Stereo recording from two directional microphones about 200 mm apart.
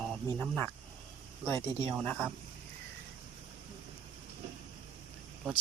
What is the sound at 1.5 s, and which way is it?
Speech, 25° right (ahead or behind).